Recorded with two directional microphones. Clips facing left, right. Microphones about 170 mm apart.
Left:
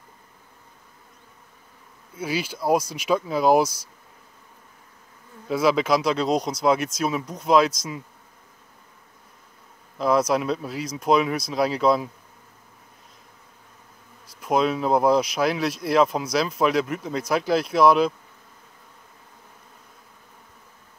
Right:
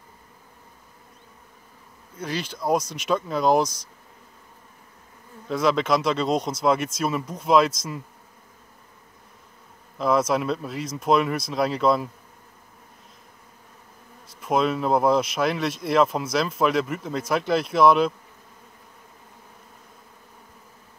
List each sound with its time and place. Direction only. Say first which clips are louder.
2.1 s speech: left 3 dB; 5° left (ahead or behind)
5.5 s speech: left 1 dB; 5° left (ahead or behind)
9.9 s speech: left 1 dB; centre (ahead or behind)
14.4 s speech: left 1 dB; centre (ahead or behind)